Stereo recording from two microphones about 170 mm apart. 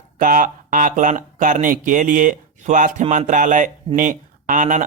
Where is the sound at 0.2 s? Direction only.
50° right (ahead or behind).